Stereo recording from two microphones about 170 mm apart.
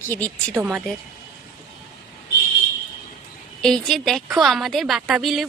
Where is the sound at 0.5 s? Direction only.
10° right (ahead or behind).